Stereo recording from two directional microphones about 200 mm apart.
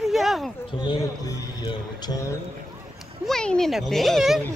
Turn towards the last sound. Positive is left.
turn(degrees=0)  # may be behind; listen again after turning